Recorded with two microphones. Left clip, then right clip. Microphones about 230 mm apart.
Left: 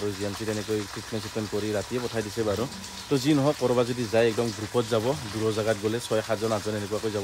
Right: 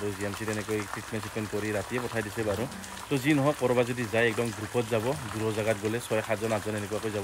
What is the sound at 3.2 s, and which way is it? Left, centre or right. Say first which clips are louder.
Speech: left 1 dB; centre.